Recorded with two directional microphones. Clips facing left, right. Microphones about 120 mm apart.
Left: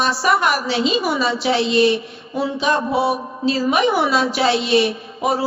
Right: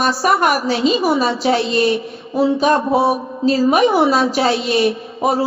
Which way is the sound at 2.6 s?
45° right (ahead or behind).